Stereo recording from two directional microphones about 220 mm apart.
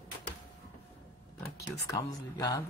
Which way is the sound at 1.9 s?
15° left (ahead or behind).